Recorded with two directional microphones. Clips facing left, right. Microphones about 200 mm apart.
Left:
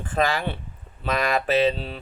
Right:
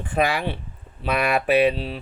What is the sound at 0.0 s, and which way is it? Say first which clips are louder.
Speech: right 1 dB; 15° right (ahead or behind).